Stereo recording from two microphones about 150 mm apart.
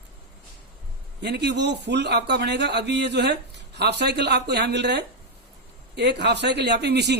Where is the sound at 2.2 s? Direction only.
90° right.